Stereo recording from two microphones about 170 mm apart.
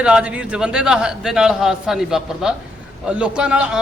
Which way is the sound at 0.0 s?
5° right (ahead or behind).